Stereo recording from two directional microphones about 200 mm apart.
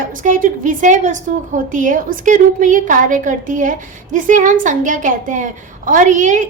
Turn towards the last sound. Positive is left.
turn(degrees=-40)  # may be behind; listen again after turning